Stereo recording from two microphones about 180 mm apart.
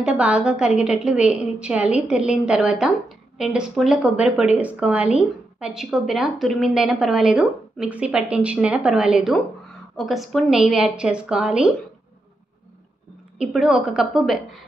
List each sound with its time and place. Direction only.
0.0 s a woman's voice: 5° right (ahead or behind)
13.4 s a woman's voice: centre (ahead or behind)